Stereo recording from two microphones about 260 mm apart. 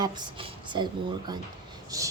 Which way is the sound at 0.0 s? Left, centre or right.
Centre.